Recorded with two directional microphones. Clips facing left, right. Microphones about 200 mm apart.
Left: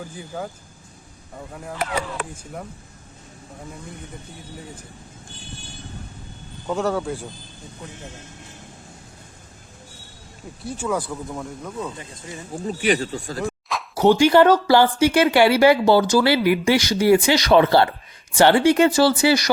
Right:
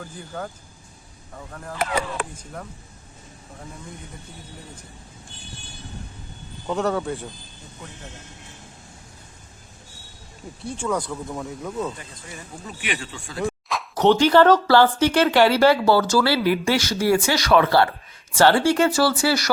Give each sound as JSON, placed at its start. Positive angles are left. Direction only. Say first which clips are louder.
{"t": 0.0, "sound": "speech", "louder": "left 2 dB", "side_deg": 5}
{"t": 2.4, "sound": "speech", "louder": "left 2 dB", "side_deg": 10}
{"t": 6.7, "sound": "speech", "louder": "even", "side_deg": 0}
{"t": 10.7, "sound": "speech", "louder": "left 1 dB", "side_deg": 5}
{"t": 12.6, "sound": "speech", "louder": "left 10 dB", "side_deg": 35}
{"t": 13.4, "sound": "speech", "louder": "right 6 dB", "side_deg": 0}